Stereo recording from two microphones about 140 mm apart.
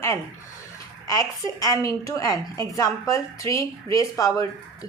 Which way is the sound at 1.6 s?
25° left (ahead or behind).